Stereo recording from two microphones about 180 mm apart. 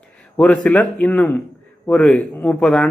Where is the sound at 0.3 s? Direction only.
5° left (ahead or behind).